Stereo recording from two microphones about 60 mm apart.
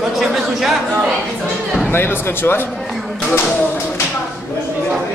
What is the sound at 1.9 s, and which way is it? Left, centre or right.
Speech, left.